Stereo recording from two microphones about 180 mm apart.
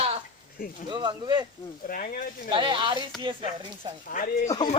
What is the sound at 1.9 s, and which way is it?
Speech, 50° left (ahead or behind).